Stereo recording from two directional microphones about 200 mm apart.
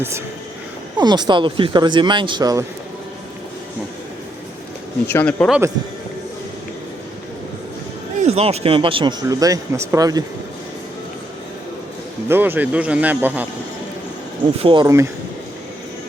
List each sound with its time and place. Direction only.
0.9 s speech: 20° right (ahead or behind)
5.0 s speech: 10° left (ahead or behind)
8.2 s speech: 30° right (ahead or behind)
12.3 s speech: 10° right (ahead or behind)
14.6 s speech: 25° right (ahead or behind)